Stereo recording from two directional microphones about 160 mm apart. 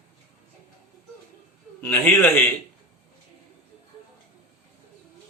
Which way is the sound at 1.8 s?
10° left (ahead or behind).